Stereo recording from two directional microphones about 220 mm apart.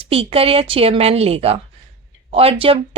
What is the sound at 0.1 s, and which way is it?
A woman's voice, 25° right (ahead or behind).